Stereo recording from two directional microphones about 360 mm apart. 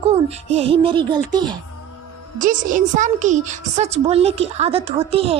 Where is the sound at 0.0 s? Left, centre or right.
Centre.